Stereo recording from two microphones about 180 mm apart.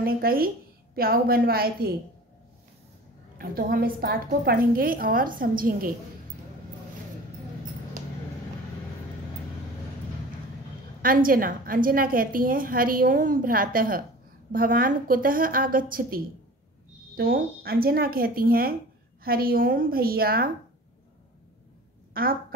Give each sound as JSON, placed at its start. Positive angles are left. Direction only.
{"t": 0.0, "sound": "speech", "side_deg": -55}
{"t": 3.3, "sound": "a woman's voice", "side_deg": -55}
{"t": 11.0, "sound": "a woman's voice", "side_deg": -50}
{"t": 17.2, "sound": "speech", "side_deg": -55}
{"t": 22.2, "sound": "a woman's voice", "side_deg": -55}